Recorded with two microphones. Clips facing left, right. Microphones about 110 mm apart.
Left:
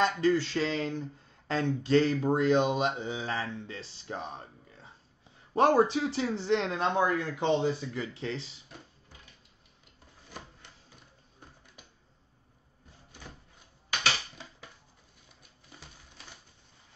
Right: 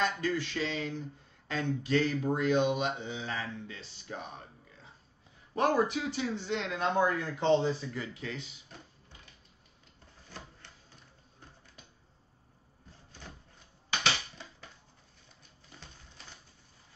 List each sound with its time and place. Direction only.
0.0 s speech: 30° left (ahead or behind); by 1.0 s 45° left (ahead or behind)
1.5 s speech: 35° left (ahead or behind)
5.5 s speech: 35° left (ahead or behind)